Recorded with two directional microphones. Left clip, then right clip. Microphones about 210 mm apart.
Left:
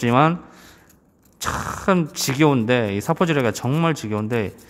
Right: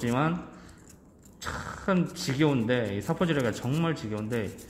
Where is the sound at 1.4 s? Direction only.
40° left (ahead or behind).